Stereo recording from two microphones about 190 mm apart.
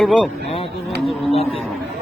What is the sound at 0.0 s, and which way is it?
Speech, 5° left (ahead or behind).